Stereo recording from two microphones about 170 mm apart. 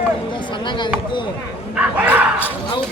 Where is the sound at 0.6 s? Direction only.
30° left (ahead or behind).